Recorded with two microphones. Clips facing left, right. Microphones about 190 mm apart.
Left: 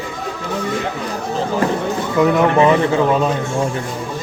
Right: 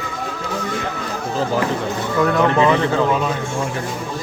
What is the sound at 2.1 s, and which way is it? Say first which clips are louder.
Speech: left 3 dB; 15° left (ahead or behind).